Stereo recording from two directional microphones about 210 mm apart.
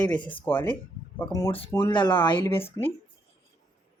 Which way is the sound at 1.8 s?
20° left (ahead or behind).